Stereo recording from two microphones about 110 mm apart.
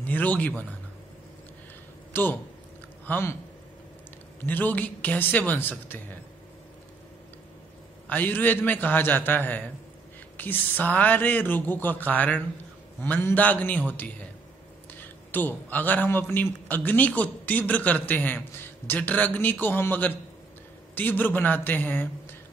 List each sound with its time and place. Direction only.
0.0 s speech: 15° left (ahead or behind)
2.1 s speech: 20° left (ahead or behind)
4.5 s speech: 15° left (ahead or behind)
8.1 s speech: 15° left (ahead or behind)